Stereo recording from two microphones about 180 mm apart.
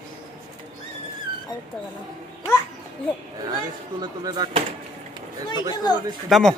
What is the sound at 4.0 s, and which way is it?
Speech, 25° right (ahead or behind).